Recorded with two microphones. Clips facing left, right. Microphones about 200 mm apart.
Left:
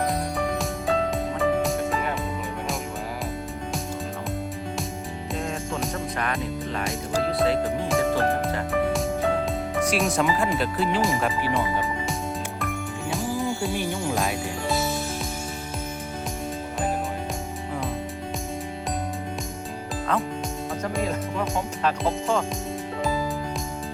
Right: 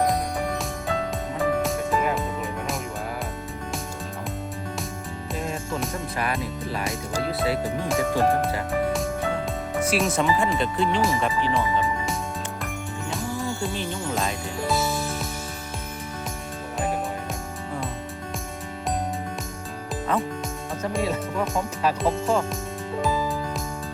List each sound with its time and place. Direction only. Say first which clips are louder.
0.6 s music: left 3 dB; centre (ahead or behind)
5.7 s speech: even; 5° right (ahead or behind)
8.4 s music: even; centre (ahead or behind)
9.8 s speech: right 1 dB; centre (ahead or behind)
13.6 s jingle bell: left 2 dB; 10° left (ahead or behind)
13.9 s speech: left 2 dB; 10° left (ahead or behind)
20.8 s speech: right 2 dB; 5° right (ahead or behind)